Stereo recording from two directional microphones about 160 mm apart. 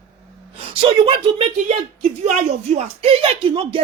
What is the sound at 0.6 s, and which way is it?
Speech, 35° right (ahead or behind).